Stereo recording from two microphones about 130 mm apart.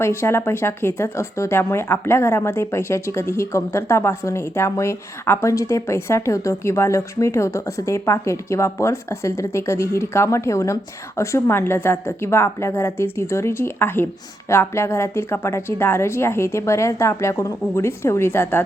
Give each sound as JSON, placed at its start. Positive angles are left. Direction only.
{"t": 0.0, "sound": "speech", "side_deg": 20}